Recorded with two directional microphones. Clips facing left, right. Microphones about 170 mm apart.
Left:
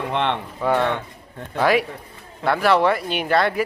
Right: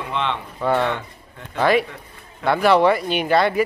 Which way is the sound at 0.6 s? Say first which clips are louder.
Even; 10° left (ahead or behind).